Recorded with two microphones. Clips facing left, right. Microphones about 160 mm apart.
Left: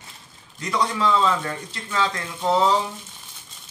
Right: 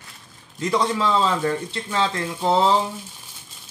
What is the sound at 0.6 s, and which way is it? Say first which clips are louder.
A man's voice: right 2 dB; 25° right (ahead or behind).